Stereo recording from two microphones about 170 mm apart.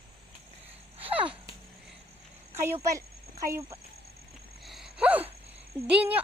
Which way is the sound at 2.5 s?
20° right (ahead or behind).